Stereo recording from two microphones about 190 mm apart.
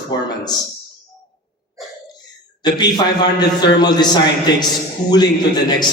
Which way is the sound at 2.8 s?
20° left (ahead or behind).